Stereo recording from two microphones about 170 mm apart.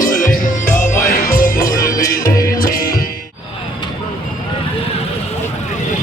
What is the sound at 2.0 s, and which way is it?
Music, 20° left (ahead or behind).